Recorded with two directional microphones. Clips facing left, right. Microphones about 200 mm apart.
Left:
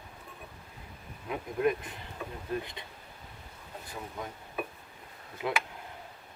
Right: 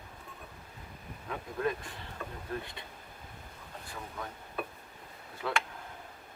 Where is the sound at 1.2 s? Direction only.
15° left (ahead or behind).